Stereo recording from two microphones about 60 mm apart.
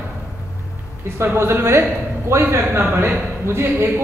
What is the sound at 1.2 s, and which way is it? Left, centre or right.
A man's voice, right.